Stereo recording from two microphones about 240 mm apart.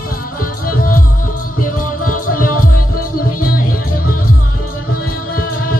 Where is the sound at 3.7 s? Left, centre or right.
Left.